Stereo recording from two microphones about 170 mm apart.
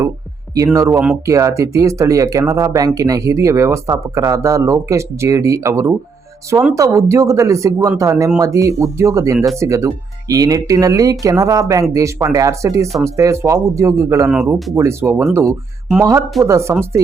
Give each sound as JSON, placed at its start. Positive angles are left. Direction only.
{"t": 0.5, "sound": "speech", "side_deg": -20}
{"t": 14.3, "sound": "speech", "side_deg": -5}
{"t": 14.8, "sound": "speech", "side_deg": -15}